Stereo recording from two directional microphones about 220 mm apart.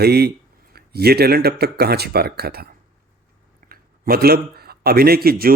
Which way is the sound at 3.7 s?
45° right (ahead or behind).